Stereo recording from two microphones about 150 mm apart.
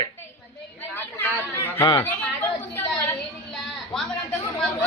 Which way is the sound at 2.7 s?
15° left (ahead or behind).